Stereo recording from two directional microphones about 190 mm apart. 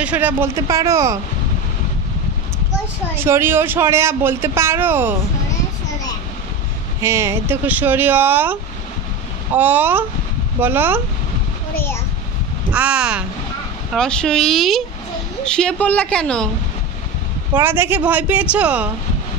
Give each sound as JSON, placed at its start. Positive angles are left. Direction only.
{"t": 0.0, "sound": "a man's voice", "side_deg": -10}
{"t": 3.2, "sound": "a man's voice", "side_deg": -10}
{"t": 7.0, "sound": "a man's voice", "side_deg": -15}
{"t": 9.6, "sound": "a man's voice", "side_deg": -10}
{"t": 12.7, "sound": "a woman's voice", "side_deg": -5}
{"t": 17.6, "sound": "a man's voice", "side_deg": -10}